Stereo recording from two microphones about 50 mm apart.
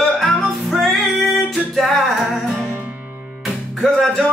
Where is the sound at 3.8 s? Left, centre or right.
Centre.